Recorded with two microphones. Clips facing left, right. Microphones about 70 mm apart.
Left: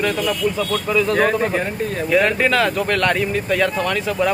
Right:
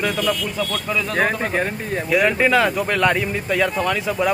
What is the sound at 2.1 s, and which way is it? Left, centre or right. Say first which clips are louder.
Speech: even; centre.